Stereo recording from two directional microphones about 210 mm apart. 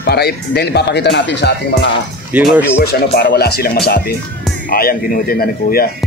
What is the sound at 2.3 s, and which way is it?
Speech, 5° right (ahead or behind).